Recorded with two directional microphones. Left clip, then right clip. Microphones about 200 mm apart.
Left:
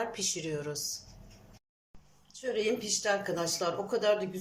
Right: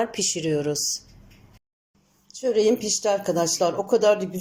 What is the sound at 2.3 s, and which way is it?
A woman's voice, 25° right (ahead or behind).